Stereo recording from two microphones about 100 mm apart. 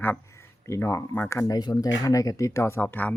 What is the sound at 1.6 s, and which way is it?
Speech, 45° left (ahead or behind).